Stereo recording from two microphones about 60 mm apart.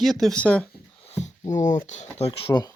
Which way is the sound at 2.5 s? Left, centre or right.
Left.